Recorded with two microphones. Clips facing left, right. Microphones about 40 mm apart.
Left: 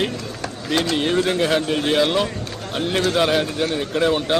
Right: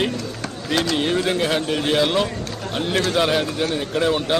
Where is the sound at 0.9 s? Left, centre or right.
Centre.